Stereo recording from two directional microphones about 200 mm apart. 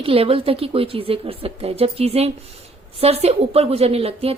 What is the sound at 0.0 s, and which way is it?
A woman's voice, 30° right (ahead or behind).